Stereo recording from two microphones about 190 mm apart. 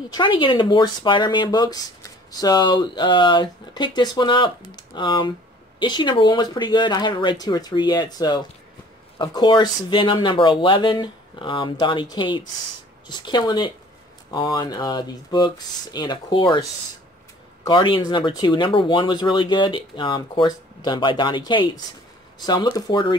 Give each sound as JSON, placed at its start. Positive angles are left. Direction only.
{"t": 0.1, "sound": "speech", "side_deg": 25}
{"t": 17.6, "sound": "speech", "side_deg": 25}